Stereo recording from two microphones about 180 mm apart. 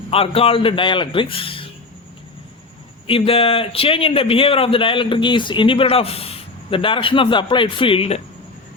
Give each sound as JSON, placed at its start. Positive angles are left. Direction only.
{"t": 0.1, "sound": "speech", "side_deg": 30}
{"t": 3.1, "sound": "speech", "side_deg": 30}